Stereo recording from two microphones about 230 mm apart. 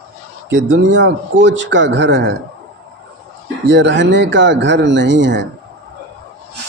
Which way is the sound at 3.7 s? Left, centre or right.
Right.